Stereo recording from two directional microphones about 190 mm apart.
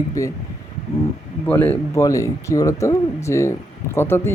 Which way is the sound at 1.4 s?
10° left (ahead or behind).